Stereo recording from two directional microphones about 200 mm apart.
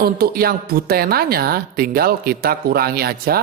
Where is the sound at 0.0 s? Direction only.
50° right (ahead or behind).